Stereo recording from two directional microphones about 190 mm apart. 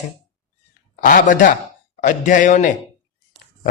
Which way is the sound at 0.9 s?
45° left (ahead or behind).